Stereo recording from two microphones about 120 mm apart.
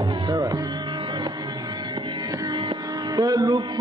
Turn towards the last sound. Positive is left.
turn(degrees=-30)  # may be behind; listen again after turning